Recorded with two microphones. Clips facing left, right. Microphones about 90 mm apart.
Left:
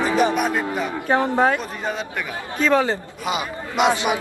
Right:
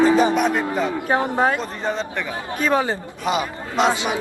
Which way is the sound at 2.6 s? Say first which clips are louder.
Left 2 dB; 15° right (ahead or behind).